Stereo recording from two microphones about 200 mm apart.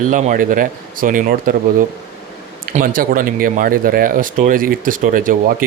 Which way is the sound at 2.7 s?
45° right (ahead or behind).